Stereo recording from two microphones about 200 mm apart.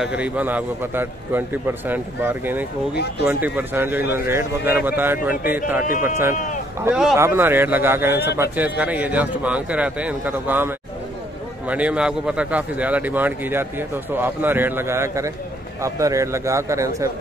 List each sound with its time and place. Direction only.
0.0 s speech: 5° right (ahead or behind)
2.9 s speech: 55° left (ahead or behind)
3.4 s speech: 10° right (ahead or behind)
6.3 s speech: 40° left (ahead or behind)
6.8 s speech: 5° right (ahead or behind)